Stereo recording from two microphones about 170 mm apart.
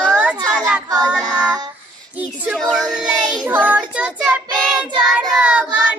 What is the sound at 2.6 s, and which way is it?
Child singing, 5° left (ahead or behind).